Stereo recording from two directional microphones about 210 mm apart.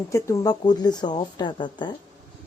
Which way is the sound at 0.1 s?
15° left (ahead or behind).